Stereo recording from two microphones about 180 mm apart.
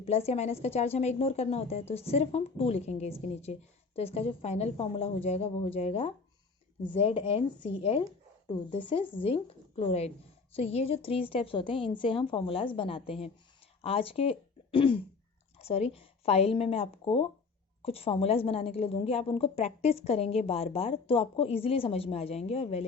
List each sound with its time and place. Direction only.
0.0 s a woman's voice: 35° left (ahead or behind)